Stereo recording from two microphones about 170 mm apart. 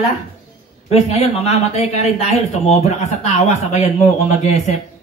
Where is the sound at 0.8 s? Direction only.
40° left (ahead or behind).